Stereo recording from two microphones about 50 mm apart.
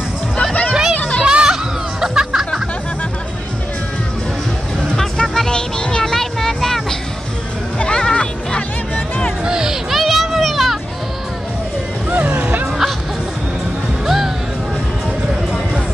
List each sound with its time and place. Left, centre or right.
0.4 s a sound: left
0.9 s music: left
1.2 s music: centre
4.9 s music: centre
5.5 s vehicle: centre
7.8 s music: left
9.4 s a sound: centre
12.1 s music: right
14.0 s music: centre